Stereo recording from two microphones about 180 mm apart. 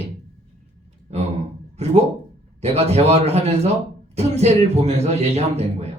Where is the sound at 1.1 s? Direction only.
35° right (ahead or behind).